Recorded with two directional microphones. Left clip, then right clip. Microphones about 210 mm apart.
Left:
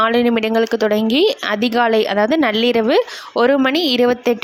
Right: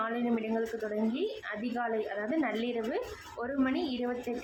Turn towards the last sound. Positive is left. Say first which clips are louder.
# left 18 dB
turn(degrees=45)  # may be behind; listen again after turning